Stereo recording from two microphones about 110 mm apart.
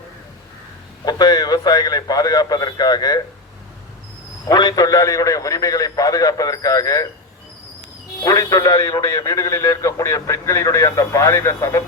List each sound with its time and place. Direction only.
1.0 s a man's voice: 35° left (ahead or behind)
4.4 s a man's voice: 40° left (ahead or behind)
8.2 s a man's voice: 30° left (ahead or behind)